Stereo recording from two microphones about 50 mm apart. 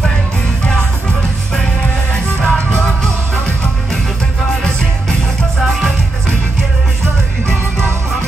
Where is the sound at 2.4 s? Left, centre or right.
Centre.